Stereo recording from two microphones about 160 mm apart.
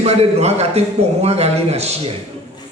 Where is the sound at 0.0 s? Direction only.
40° right (ahead or behind).